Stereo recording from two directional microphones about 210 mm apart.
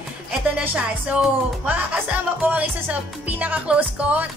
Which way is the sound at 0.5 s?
5° right (ahead or behind).